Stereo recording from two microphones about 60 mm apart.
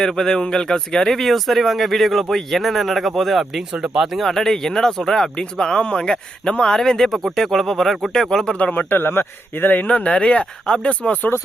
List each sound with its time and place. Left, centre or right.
0.0 s speech: centre
4.3 s speech: centre
8.7 s speech: left